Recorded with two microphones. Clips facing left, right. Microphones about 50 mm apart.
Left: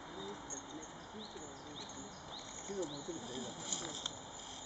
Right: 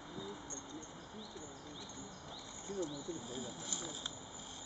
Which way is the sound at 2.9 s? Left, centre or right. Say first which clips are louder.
Even; centre.